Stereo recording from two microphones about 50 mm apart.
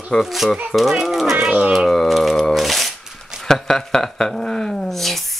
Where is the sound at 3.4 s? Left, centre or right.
Centre.